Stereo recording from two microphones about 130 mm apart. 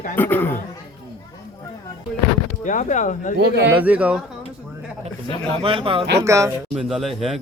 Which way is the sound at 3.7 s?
10° right (ahead or behind).